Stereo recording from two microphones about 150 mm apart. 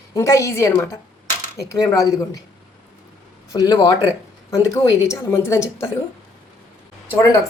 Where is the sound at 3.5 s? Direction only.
25° left (ahead or behind).